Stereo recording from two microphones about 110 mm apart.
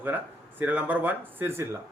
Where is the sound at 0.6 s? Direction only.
15° right (ahead or behind).